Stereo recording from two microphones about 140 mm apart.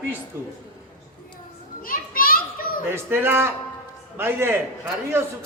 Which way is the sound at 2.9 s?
15° right (ahead or behind).